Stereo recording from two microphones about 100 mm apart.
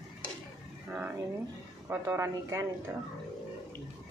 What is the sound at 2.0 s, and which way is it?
Speech, 30° right (ahead or behind).